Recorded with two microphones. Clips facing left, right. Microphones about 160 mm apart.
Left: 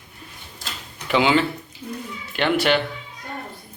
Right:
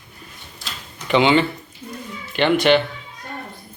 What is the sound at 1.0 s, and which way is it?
Speech, 5° left (ahead or behind).